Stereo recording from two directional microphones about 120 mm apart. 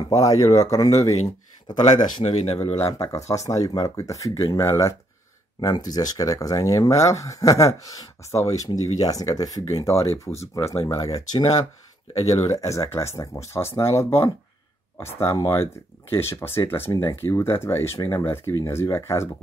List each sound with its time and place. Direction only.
0.1 s speech: 30° left (ahead or behind)
2.1 s speech: 60° left (ahead or behind)
2.9 s speech: 25° left (ahead or behind)